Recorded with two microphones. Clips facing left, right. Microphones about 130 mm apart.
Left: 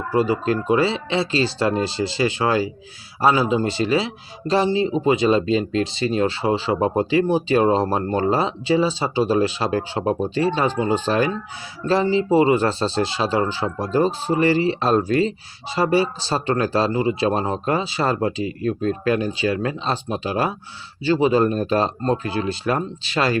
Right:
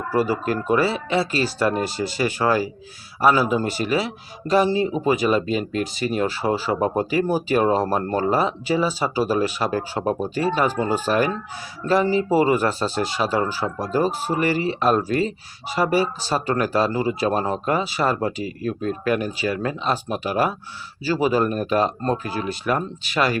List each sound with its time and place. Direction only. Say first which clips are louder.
0.1 s speech: left 2 dB; 20° left (ahead or behind)